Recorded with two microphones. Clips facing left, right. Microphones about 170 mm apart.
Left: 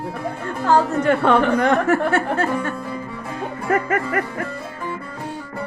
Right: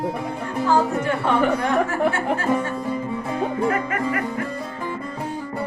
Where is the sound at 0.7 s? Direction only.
75° left (ahead or behind).